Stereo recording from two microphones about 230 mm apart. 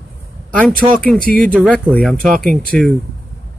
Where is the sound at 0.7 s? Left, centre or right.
Right.